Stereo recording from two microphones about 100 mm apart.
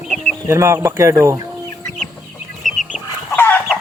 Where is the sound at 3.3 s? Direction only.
20° left (ahead or behind).